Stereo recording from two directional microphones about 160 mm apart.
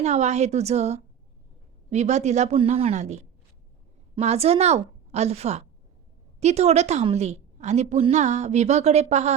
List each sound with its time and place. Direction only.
0.0 s a woman's voice: 45° right (ahead or behind)